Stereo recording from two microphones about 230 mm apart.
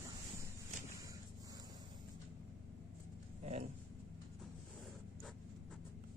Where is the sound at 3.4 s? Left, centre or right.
Right.